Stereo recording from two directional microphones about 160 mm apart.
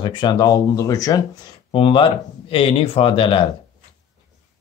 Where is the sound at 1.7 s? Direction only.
35° left (ahead or behind).